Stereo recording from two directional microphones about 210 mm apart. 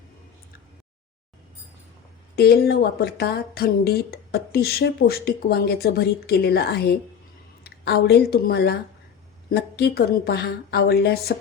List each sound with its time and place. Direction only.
2.3 s a woman's voice: 50° left (ahead or behind)